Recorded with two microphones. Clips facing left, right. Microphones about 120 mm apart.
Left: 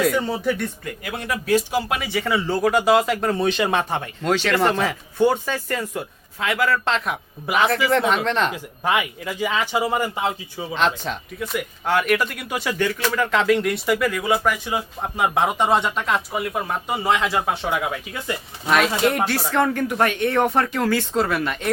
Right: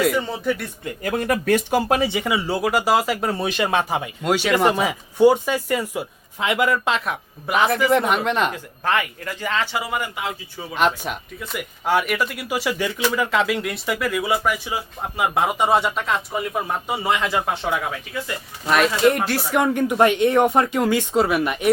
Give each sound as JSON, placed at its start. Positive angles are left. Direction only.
{"t": 0.0, "sound": "speech", "side_deg": 0}
{"t": 1.0, "sound": "speech", "side_deg": -45}
{"t": 1.9, "sound": "speech", "side_deg": -30}
{"t": 2.1, "sound": "speech", "side_deg": -15}
{"t": 6.4, "sound": "speech", "side_deg": -20}
{"t": 6.8, "sound": "speech", "side_deg": -5}
{"t": 7.9, "sound": "speech", "side_deg": -10}
{"t": 8.5, "sound": "speech", "side_deg": 15}
{"t": 9.7, "sound": "speech", "side_deg": 30}
{"t": 10.8, "sound": "speech", "side_deg": -10}
{"t": 19.5, "sound": "speech", "side_deg": -15}